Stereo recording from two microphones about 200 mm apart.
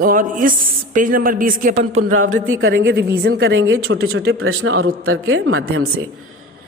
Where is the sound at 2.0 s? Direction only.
90° right.